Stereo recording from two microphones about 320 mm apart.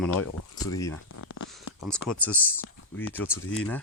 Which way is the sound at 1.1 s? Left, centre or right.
Left.